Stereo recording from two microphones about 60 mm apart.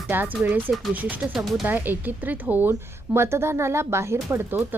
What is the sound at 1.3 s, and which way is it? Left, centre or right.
Speech, centre.